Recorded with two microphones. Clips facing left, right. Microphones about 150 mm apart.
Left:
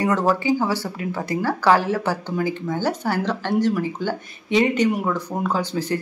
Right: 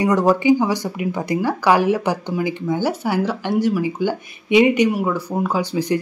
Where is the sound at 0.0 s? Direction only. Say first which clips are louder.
Right 4 dB; 15° right (ahead or behind).